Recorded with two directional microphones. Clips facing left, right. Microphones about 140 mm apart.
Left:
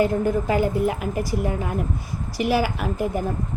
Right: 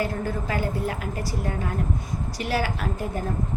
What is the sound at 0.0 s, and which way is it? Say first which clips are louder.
A woman's voice: left 7 dB; 20° left (ahead or behind).